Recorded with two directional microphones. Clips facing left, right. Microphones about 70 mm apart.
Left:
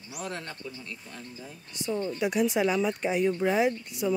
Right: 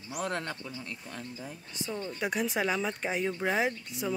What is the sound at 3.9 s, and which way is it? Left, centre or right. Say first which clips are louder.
Speech: left 5 dB; left.